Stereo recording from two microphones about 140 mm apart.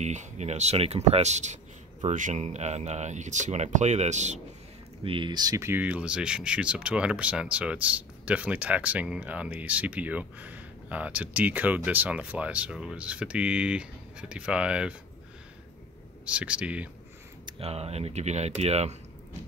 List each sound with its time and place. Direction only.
0.0 s speech: 55° right (ahead or behind)
5.0 s speech: 35° right (ahead or behind); by 15.0 s 5° right (ahead or behind)
16.3 s speech: 10° right (ahead or behind)
17.6 s speech: 45° right (ahead or behind)